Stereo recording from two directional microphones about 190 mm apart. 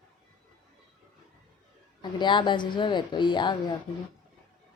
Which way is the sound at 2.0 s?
25° left (ahead or behind).